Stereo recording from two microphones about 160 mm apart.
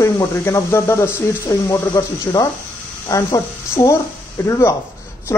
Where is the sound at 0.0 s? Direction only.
20° left (ahead or behind).